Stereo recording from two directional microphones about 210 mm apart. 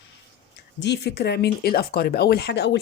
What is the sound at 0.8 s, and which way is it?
Speech, 55° left (ahead or behind).